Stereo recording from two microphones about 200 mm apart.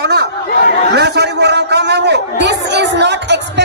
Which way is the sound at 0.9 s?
55° right (ahead or behind).